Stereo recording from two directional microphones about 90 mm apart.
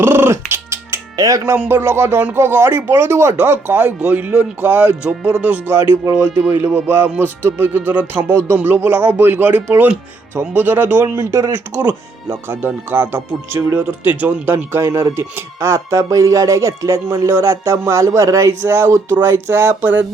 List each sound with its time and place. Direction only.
0.0 s music: 25° right (ahead or behind)
1.5 s speech: 25° right (ahead or behind)
5.7 s speech: 30° right (ahead or behind)
11.3 s speech: 35° right (ahead or behind)
11.7 s speech: 20° right (ahead or behind)